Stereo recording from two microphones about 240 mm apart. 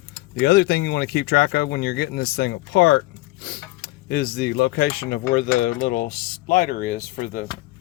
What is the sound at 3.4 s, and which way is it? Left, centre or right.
Speech, left.